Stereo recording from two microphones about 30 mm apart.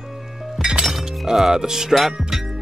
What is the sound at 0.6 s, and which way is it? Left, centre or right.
Music, centre.